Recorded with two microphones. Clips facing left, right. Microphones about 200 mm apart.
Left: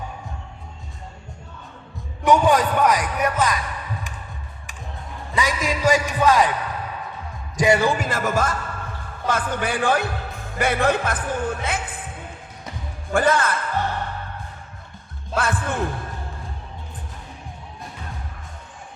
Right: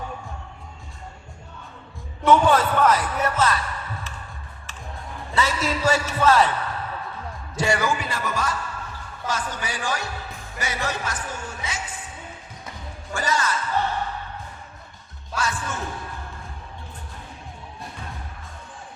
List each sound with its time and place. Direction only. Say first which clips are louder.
2.2 s a man's voice: left 1 dB; 15° left (ahead or behind)
5.3 s a man's voice: left 1 dB; 15° left (ahead or behind)
7.9 s heart sounds: left 5 dB; 50° left (ahead or behind)
9.2 s music: left 6 dB; 55° left (ahead or behind)
13.1 s music: left 6 dB; 55° left (ahead or behind)
15.4 s music: left 4 dB; 55° left (ahead or behind)